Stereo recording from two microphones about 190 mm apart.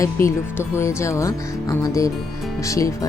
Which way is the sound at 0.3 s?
15° left (ahead or behind).